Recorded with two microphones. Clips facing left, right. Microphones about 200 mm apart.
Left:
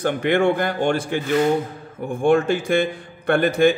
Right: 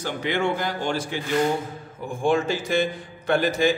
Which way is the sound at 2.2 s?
55° left (ahead or behind).